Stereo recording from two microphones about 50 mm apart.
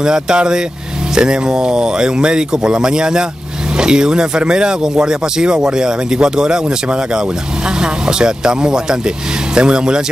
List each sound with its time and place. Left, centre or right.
0.0 s speech: centre